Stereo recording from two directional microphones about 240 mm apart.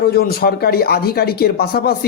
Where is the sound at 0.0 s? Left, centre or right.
Left.